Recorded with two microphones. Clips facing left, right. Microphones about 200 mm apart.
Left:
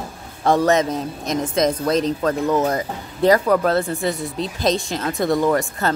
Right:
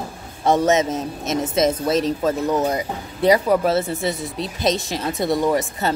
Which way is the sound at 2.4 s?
20° right (ahead or behind).